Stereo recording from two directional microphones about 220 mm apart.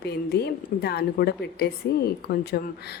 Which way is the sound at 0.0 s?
45° left (ahead or behind).